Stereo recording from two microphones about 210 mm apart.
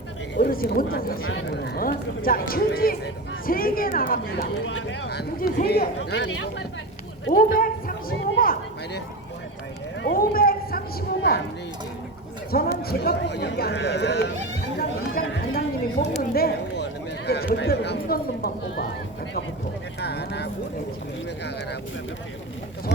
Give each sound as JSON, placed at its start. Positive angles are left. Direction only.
{"t": 0.3, "sound": "speech", "side_deg": 45}
{"t": 1.2, "sound": "speech", "side_deg": 60}
{"t": 4.6, "sound": "speech", "side_deg": 60}
{"t": 7.3, "sound": "speech", "side_deg": 45}
{"t": 10.0, "sound": "speech", "side_deg": 45}
{"t": 12.8, "sound": "speech", "side_deg": 50}
{"t": 14.8, "sound": "chatter", "side_deg": 45}
{"t": 16.3, "sound": "speech", "side_deg": 45}
{"t": 20.0, "sound": "speech", "side_deg": 55}